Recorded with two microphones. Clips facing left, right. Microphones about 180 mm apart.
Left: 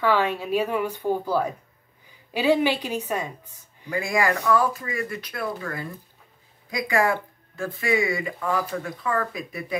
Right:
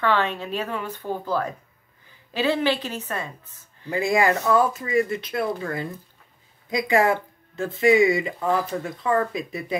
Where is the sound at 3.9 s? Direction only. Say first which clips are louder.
Right 3 dB; 25° right (ahead or behind).